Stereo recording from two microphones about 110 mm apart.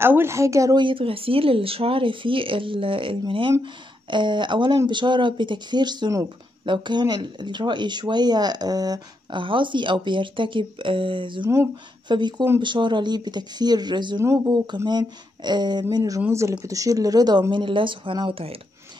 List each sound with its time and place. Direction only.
0.0 s speech: 20° right (ahead or behind)
0.7 s speech: 50° right (ahead or behind)
9.4 s speech: 50° right (ahead or behind)
17.5 s speech: 50° right (ahead or behind)